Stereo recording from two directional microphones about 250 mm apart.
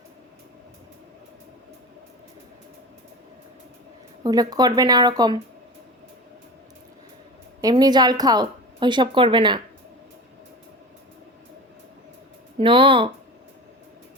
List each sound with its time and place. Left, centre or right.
4.2 s speech: centre
7.6 s speech: centre
12.5 s speech: centre